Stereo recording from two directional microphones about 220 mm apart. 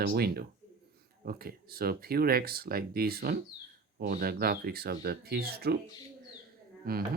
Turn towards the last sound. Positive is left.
turn(degrees=-40)  # may be behind; listen again after turning